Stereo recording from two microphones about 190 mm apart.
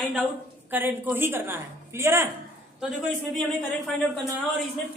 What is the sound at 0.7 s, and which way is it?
A woman's voice, 10° right (ahead or behind).